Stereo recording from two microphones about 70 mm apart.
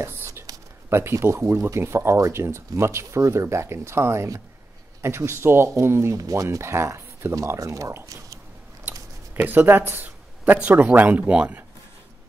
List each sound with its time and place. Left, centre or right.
0.0 s a sound: right
0.8 s speech: right
6.1 s speech: right
6.6 s speech: right
7.4 s speech: right
9.3 s speech: right
10.4 s speech: right